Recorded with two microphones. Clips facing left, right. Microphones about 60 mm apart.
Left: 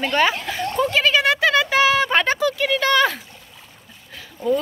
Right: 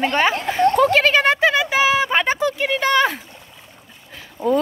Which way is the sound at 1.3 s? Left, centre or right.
Right.